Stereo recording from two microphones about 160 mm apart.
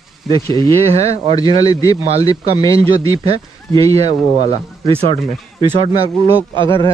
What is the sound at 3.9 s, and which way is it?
Speech, 40° right (ahead or behind).